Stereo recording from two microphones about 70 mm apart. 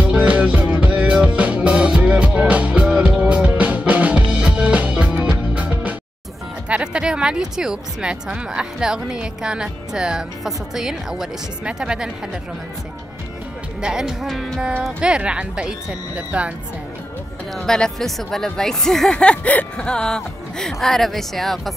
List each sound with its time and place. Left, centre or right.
0.0 s music: centre
6.7 s speech: centre
13.7 s speech: centre
14.8 s speech: centre
17.6 s speech: centre
19.1 s speech: centre